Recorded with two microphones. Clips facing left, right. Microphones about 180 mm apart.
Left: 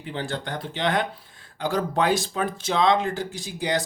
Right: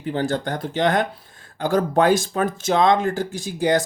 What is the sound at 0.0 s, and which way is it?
Speech, 45° right (ahead or behind).